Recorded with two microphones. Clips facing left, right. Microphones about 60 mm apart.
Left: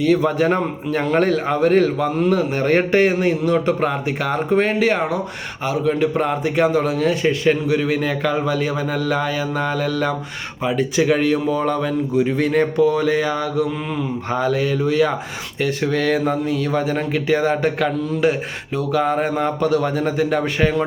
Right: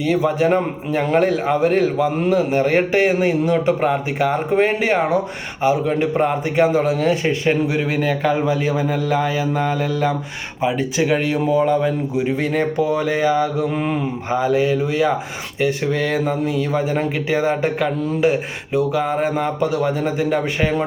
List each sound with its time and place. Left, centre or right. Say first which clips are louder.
0.0 s a man's voice: left 1 dB; centre
13.7 s mantra: right 3 dB; right
14.3 s speech: right 3 dB; centre